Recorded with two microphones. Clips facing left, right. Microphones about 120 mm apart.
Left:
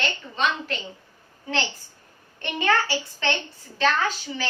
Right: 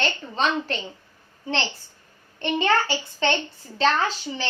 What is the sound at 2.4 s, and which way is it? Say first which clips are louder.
A woman's voice: right 2 dB; 25° right (ahead or behind).